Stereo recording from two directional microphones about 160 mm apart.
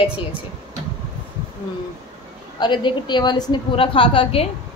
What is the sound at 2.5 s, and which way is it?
A woman's voice, 30° left (ahead or behind).